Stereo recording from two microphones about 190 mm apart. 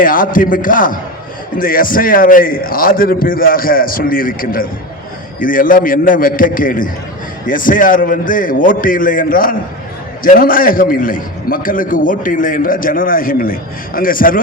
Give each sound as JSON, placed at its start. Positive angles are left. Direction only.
{"t": 0.0, "sound": "a man's voice", "side_deg": 45}